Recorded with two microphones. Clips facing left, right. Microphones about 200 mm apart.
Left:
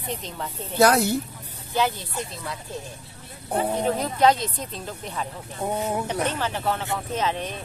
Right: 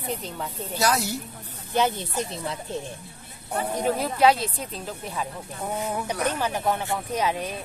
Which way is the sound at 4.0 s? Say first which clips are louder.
Right 1 dB; 5° right (ahead or behind).